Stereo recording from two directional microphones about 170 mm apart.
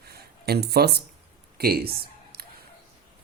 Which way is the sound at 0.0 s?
70° right (ahead or behind).